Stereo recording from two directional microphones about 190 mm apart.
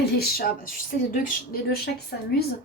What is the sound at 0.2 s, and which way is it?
Speech, 50° left (ahead or behind).